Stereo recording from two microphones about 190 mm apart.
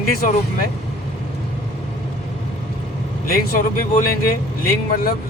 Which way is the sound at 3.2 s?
50° left (ahead or behind).